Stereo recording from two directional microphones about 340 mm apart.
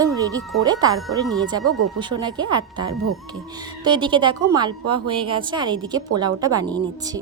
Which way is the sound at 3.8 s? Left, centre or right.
Centre.